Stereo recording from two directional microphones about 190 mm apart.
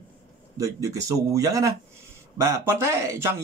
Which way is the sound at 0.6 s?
15° right (ahead or behind).